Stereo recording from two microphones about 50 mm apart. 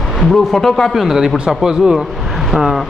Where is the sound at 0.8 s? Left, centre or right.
Centre.